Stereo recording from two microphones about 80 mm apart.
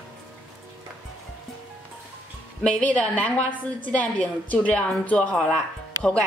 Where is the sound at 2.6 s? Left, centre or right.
Centre.